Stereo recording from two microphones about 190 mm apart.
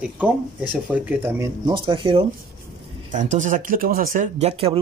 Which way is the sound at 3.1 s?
40° right (ahead or behind).